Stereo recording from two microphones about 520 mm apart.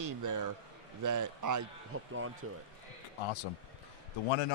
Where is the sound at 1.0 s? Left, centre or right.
Right.